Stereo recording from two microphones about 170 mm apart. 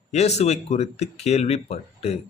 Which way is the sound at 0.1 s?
40° left (ahead or behind).